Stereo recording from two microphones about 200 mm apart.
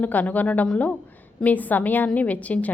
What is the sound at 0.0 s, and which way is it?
A woman's voice, 10° left (ahead or behind).